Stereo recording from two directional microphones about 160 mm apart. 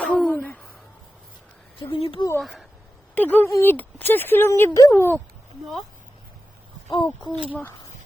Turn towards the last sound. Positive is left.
turn(degrees=35)  # may be behind; listen again after turning